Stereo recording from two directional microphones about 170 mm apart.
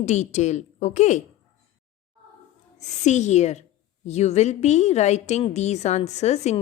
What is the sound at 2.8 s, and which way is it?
A woman's voice, 45° left (ahead or behind).